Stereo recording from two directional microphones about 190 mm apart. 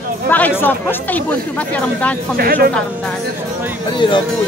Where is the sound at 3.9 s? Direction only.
25° left (ahead or behind).